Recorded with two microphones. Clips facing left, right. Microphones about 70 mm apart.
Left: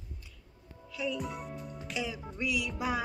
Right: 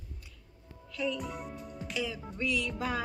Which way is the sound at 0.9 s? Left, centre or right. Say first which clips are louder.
Right 1 dB; centre.